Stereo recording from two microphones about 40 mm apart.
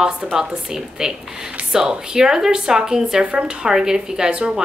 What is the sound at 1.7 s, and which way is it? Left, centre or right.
Speech, centre.